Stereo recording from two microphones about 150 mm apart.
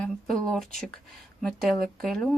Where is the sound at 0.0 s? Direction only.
5° left (ahead or behind).